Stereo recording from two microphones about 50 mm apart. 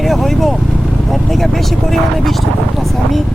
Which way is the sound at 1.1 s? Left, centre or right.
Centre.